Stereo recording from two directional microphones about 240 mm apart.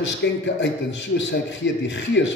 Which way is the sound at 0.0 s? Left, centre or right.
Left.